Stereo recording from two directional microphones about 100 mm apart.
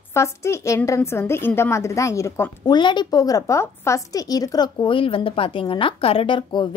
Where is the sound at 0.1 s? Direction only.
30° left (ahead or behind).